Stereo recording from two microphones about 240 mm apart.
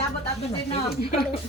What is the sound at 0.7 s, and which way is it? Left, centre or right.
Speech, left.